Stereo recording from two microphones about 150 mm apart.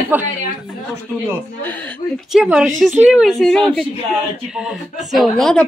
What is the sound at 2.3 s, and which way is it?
Speech, 5° right (ahead or behind).